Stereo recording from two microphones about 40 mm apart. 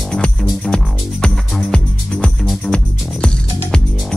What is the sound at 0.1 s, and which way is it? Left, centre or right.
Music, left.